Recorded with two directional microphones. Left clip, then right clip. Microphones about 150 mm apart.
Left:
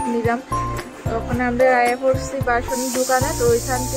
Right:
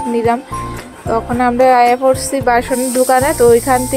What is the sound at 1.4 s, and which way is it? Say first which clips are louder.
Speech: right 6 dB; 35° right (ahead or behind).